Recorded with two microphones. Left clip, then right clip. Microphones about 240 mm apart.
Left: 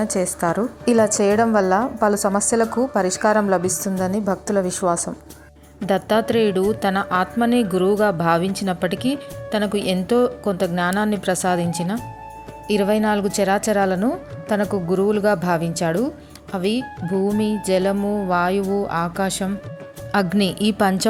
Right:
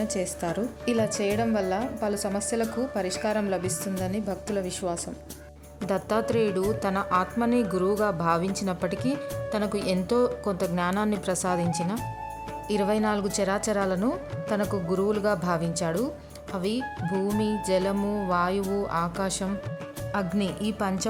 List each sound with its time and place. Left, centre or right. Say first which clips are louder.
0.1 s a woman's voice: left 8 dB; centre